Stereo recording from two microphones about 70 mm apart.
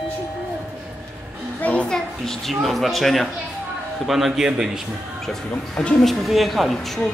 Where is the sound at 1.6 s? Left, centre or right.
Centre.